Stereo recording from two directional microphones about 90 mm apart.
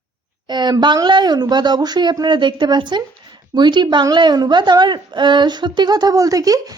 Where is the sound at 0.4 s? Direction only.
55° right (ahead or behind).